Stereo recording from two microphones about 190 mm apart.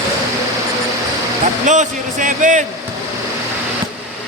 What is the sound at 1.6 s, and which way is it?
Speech, 40° right (ahead or behind).